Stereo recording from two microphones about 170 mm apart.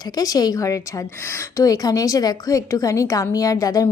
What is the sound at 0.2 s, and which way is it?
A woman's voice, 20° left (ahead or behind).